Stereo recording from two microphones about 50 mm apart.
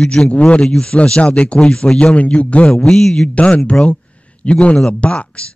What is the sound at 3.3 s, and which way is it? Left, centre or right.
Speech, left.